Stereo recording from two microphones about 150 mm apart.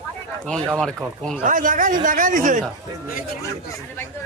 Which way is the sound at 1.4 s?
60° right (ahead or behind).